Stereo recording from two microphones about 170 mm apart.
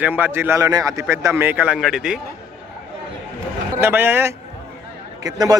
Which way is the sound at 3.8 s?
10° right (ahead or behind).